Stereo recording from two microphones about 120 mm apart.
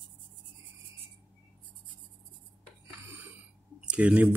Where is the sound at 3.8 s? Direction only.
10° right (ahead or behind).